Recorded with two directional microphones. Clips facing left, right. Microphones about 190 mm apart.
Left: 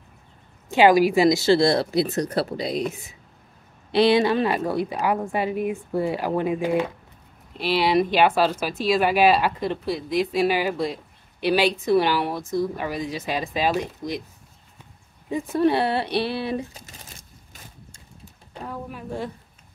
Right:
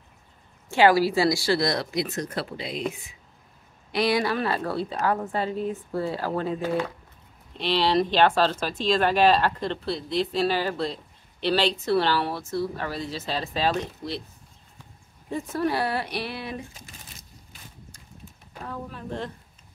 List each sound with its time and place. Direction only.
0.7 s speech: 15° left (ahead or behind); by 3.2 s 40° left (ahead or behind)
3.9 s speech: 25° left (ahead or behind)
15.2 s speech: 10° left (ahead or behind); by 17.6 s 40° left (ahead or behind)
18.5 s speech: 15° left (ahead or behind)